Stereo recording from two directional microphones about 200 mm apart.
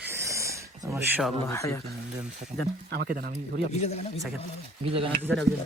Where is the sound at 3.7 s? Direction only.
35° left (ahead or behind).